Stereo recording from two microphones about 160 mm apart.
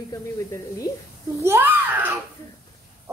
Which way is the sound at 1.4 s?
15° right (ahead or behind).